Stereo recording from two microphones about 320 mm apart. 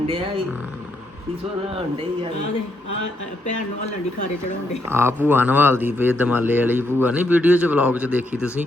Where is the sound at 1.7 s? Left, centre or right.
Centre.